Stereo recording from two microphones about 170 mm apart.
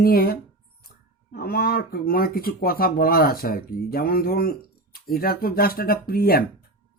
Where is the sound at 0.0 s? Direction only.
65° left (ahead or behind).